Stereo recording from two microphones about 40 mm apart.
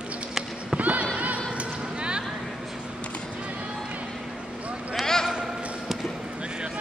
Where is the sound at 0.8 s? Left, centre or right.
Right.